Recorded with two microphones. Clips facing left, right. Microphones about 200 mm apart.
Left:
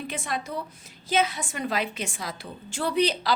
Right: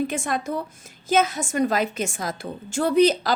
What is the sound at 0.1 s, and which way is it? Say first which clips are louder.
A woman's voice: right 5 dB; 45° right (ahead or behind).